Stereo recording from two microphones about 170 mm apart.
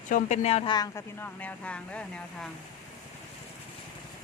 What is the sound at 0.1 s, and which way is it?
Speech, 40° left (ahead or behind).